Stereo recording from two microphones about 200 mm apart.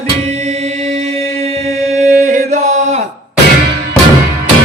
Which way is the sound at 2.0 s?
40° right (ahead or behind).